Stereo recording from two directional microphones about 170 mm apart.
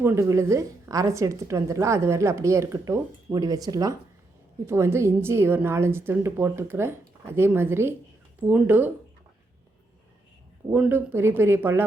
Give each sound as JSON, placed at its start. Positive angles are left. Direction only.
{"t": 0.0, "sound": "a woman's voice", "side_deg": -15}
{"t": 10.7, "sound": "a woman's voice", "side_deg": -10}